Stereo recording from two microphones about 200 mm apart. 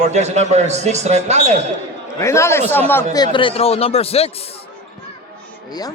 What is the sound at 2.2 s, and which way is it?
A man's voice, 15° left (ahead or behind).